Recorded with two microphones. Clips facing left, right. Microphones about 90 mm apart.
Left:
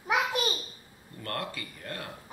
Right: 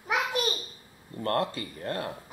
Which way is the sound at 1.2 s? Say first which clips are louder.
Right 8 dB; 30° right (ahead or behind).